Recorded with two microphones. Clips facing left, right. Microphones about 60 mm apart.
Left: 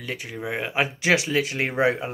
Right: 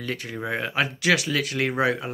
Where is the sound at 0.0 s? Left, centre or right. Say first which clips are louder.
Right 1 dB; centre.